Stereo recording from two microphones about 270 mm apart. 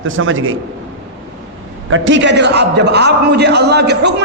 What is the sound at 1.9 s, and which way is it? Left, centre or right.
A man's voice, right.